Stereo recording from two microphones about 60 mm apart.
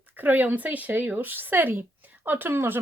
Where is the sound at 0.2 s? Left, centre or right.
Right.